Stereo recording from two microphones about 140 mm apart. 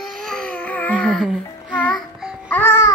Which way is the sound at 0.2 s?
5° left (ahead or behind).